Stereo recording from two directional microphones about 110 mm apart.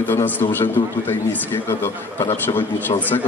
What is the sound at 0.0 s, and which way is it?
Speech, 20° left (ahead or behind).